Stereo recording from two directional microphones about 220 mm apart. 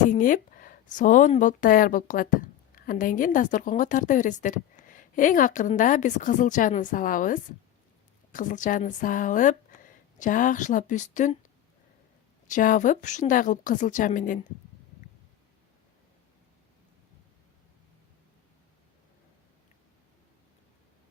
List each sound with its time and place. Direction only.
0.1 s a woman's voice: 35° left (ahead or behind)
12.5 s a woman's voice: 35° left (ahead or behind)